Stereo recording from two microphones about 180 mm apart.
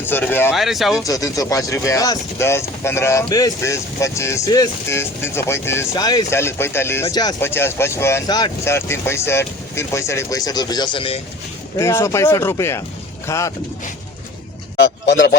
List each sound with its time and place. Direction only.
0.0 s speech: 10° left (ahead or behind)
0.5 s speech: centre (ahead or behind)
1.0 s speech: 20° left (ahead or behind)
11.8 s speech: 15° left (ahead or behind)
14.8 s a man's voice: 70° left (ahead or behind)